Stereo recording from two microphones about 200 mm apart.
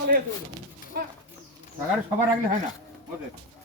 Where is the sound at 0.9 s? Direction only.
50° right (ahead or behind).